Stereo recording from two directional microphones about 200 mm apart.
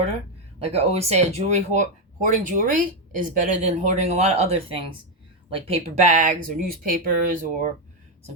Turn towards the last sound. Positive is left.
turn(degrees=-40)  # may be behind; listen again after turning